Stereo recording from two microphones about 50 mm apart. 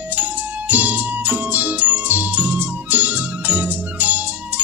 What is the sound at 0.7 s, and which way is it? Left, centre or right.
Music, right.